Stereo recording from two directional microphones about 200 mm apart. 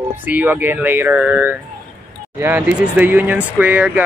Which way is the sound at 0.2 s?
10° right (ahead or behind).